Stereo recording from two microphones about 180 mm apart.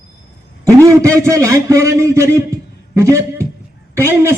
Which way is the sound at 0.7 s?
15° right (ahead or behind).